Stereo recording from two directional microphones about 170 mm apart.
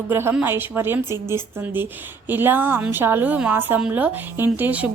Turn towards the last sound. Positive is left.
turn(degrees=-10)  # may be behind; listen again after turning